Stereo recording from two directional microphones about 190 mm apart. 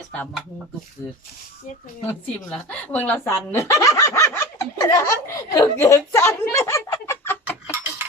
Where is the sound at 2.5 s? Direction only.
5° left (ahead or behind).